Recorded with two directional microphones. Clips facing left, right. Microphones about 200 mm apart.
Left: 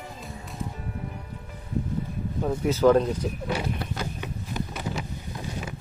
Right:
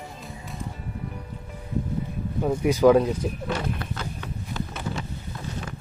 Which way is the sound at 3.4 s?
5° left (ahead or behind).